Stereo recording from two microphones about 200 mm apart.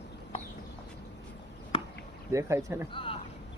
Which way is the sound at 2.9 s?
25° left (ahead or behind).